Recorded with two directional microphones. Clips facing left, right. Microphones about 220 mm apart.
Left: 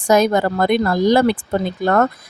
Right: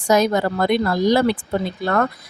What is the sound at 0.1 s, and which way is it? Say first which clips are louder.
Speech: left 2 dB; 50° left (ahead or behind).